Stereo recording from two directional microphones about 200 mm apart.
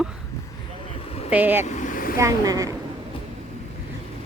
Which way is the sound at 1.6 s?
40° left (ahead or behind).